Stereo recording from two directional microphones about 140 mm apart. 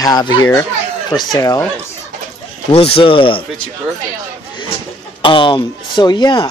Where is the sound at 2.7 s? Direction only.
45° left (ahead or behind).